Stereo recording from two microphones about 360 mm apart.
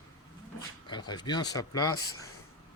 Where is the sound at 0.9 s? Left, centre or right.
Centre.